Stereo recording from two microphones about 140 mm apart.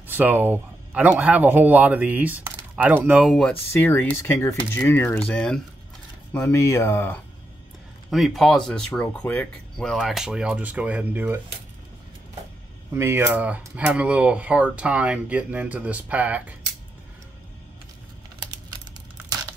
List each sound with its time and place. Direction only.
0.0 s speech: 15° right (ahead or behind)
3.3 s speech: 10° left (ahead or behind)
6.5 s speech: 20° left (ahead or behind)
8.1 s speech: centre (ahead or behind)
12.9 s speech: 20° right (ahead or behind)